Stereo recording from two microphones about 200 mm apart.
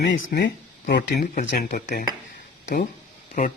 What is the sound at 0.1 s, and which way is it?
Speech, 45° left (ahead or behind).